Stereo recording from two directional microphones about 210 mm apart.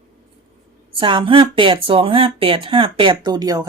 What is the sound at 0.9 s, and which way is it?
Speech, 25° right (ahead or behind).